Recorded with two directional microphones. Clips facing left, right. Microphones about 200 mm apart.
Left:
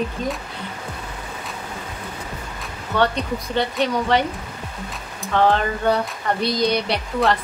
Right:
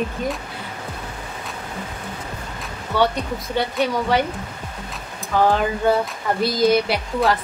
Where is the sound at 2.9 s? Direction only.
10° right (ahead or behind).